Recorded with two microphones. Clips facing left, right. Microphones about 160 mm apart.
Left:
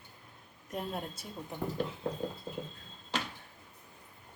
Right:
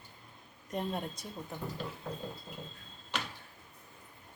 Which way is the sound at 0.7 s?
5° left (ahead or behind).